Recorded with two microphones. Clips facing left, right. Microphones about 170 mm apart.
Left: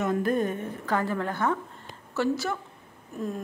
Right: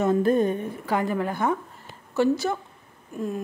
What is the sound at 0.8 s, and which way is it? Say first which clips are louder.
Speech: right 2 dB; 15° right (ahead or behind).